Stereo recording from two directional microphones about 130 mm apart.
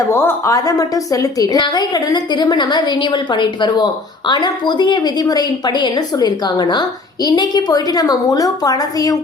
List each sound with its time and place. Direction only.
0.1 s a woman's voice: 20° left (ahead or behind)